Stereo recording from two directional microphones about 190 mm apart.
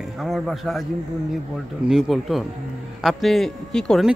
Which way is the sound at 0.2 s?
Centre (ahead or behind).